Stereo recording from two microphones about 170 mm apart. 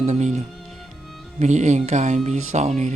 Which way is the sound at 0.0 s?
45° right (ahead or behind).